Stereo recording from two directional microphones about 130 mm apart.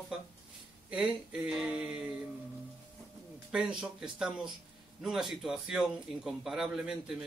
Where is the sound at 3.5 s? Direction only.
5° right (ahead or behind).